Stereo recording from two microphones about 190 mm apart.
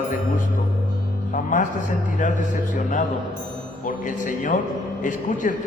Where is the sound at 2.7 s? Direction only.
40° left (ahead or behind).